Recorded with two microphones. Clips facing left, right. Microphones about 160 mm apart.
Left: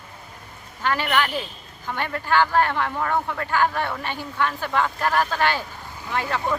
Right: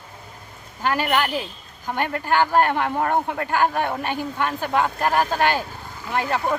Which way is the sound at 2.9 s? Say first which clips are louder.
Right 3 dB; 45° right (ahead or behind).